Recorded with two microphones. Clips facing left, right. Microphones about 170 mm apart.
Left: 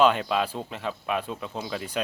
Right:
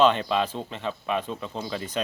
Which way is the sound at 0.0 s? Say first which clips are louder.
Right 1 dB; 5° left (ahead or behind).